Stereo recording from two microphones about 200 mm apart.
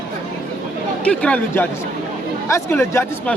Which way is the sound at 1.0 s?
5° left (ahead or behind).